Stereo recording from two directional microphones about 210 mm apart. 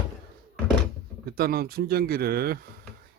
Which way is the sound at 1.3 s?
45° right (ahead or behind).